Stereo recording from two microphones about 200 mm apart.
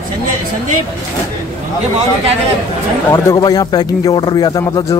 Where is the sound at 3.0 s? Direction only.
15° left (ahead or behind).